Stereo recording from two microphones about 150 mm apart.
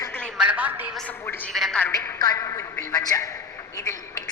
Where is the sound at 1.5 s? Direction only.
5° left (ahead or behind).